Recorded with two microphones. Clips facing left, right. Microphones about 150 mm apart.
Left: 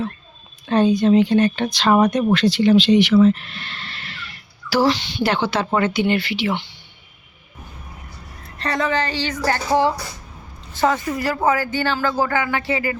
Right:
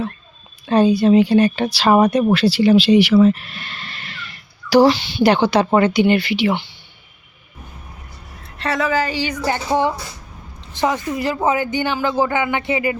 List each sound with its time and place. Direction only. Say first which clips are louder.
0.7 s speech: right 2 dB; 10° right (ahead or behind)
8.5 s speech: right 2 dB; 5° right (ahead or behind); by 13.0 s 20° right (ahead or behind)